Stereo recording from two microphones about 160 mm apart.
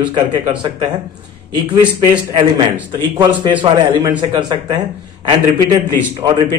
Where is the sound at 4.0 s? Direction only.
30° right (ahead or behind).